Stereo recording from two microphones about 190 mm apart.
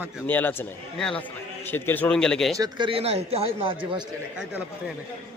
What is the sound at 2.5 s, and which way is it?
A man's voice, 20° right (ahead or behind).